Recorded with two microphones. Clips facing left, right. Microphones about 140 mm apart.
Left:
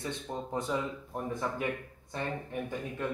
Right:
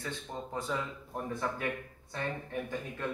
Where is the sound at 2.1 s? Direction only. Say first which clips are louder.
Left 1 dB; 10° left (ahead or behind).